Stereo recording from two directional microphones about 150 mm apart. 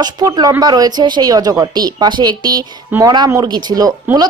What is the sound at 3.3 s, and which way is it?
A woman's voice, 25° right (ahead or behind).